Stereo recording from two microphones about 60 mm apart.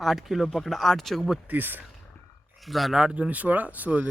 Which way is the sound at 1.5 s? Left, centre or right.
Right.